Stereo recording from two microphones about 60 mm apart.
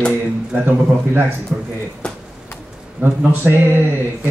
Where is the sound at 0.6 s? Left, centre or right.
Right.